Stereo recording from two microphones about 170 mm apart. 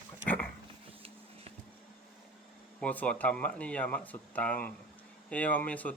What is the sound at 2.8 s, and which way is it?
Speech, 10° left (ahead or behind).